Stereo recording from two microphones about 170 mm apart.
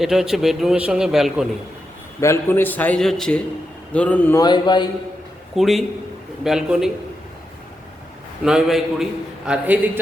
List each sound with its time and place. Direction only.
0.0 s a man's voice: centre (ahead or behind)
2.2 s a man's voice: 15° left (ahead or behind)
4.4 s a man's voice: 25° left (ahead or behind)
5.5 s a man's voice: centre (ahead or behind)
8.4 s a man's voice: 5° right (ahead or behind)